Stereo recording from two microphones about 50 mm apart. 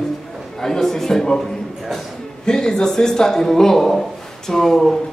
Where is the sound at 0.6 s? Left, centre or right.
Centre.